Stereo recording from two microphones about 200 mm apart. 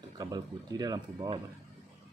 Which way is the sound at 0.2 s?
20° right (ahead or behind).